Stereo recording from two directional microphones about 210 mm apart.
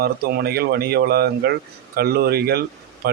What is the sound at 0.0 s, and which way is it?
Speech, 50° right (ahead or behind).